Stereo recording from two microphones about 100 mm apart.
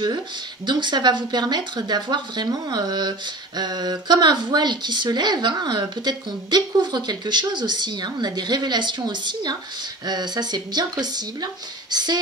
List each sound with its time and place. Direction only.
0.7 s speech: 50° right (ahead or behind)